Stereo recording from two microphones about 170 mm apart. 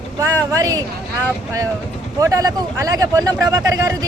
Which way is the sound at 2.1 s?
20° right (ahead or behind).